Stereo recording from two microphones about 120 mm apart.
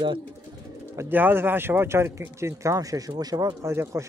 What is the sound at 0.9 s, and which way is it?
A man's voice, 15° right (ahead or behind).